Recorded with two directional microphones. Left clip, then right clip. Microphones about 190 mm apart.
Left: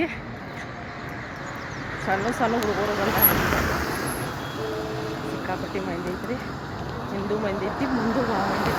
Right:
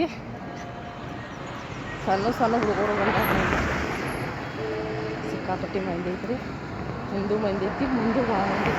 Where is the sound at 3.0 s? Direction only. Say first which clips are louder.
Even; 75° left (ahead or behind).